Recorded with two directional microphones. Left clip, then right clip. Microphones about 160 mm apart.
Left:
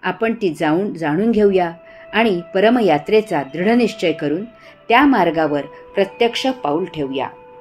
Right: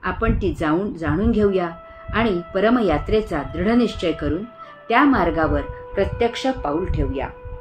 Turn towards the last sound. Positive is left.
turn(degrees=40)  # may be behind; listen again after turning